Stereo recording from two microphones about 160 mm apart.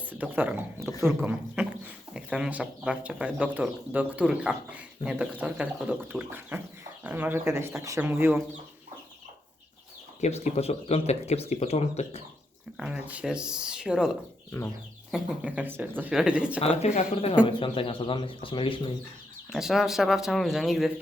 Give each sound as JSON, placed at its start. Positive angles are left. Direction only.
{"t": 0.1, "sound": "speech", "side_deg": -10}
{"t": 10.2, "sound": "speech", "side_deg": 45}
{"t": 12.7, "sound": "speech", "side_deg": -5}
{"t": 15.1, "sound": "speech", "side_deg": -5}
{"t": 16.6, "sound": "speech", "side_deg": 40}
{"t": 19.5, "sound": "speech", "side_deg": 0}